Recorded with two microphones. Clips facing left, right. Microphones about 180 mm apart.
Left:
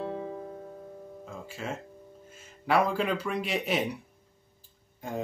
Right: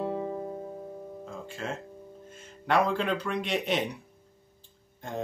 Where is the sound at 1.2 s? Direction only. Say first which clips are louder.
Even; 5° left (ahead or behind).